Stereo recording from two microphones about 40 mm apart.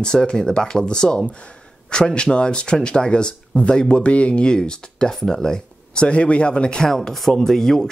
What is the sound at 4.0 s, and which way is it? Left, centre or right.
Speech, left.